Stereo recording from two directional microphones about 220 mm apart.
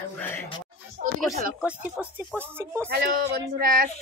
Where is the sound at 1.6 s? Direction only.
5° right (ahead or behind).